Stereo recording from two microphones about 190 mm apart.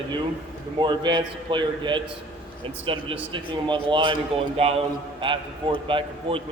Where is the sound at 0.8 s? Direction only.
25° right (ahead or behind).